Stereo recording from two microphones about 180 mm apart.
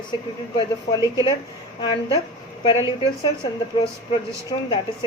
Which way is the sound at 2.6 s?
25° left (ahead or behind).